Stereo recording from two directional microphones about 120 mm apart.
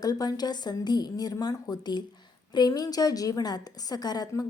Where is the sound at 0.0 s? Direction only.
35° left (ahead or behind).